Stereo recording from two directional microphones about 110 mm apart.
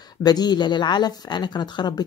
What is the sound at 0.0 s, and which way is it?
Speech, 40° left (ahead or behind).